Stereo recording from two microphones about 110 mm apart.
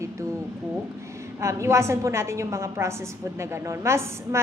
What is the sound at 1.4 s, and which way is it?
Speech, 25° right (ahead or behind).